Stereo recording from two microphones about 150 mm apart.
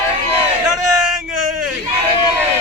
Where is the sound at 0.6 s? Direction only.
5° right (ahead or behind).